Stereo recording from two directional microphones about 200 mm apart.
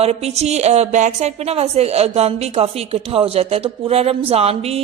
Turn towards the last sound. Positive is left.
turn(degrees=-30)  # may be behind; listen again after turning